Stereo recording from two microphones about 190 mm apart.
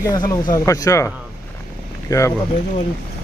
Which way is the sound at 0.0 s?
20° left (ahead or behind).